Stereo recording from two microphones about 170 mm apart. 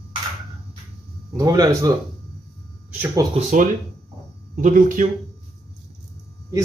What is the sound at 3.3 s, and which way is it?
Speech, 50° right (ahead or behind).